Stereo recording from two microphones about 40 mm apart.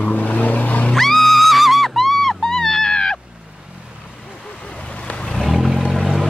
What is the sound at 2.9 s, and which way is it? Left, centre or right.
Cat, left.